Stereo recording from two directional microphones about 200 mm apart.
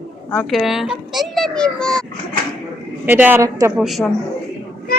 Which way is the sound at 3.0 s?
10° right (ahead or behind).